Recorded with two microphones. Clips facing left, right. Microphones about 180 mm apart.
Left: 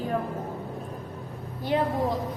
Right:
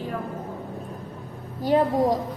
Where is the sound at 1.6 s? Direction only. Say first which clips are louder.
Right 5 dB; 40° right (ahead or behind).